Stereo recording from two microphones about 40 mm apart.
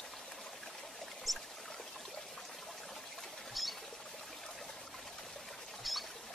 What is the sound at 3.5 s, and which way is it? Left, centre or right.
Rodents, centre.